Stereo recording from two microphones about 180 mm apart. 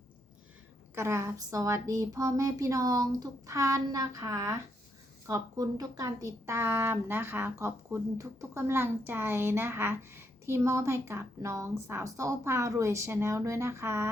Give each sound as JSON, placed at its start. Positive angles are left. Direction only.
{"t": 0.9, "sound": "speech", "side_deg": -15}